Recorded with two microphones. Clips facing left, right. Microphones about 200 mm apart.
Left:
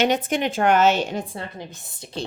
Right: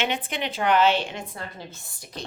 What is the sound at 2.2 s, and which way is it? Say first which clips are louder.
Speech: left 7 dB; 30° left (ahead or behind).